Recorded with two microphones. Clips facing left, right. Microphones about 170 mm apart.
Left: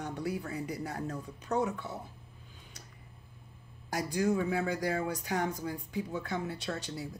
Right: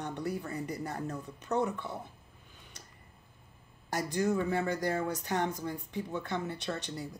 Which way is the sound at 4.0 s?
10° left (ahead or behind).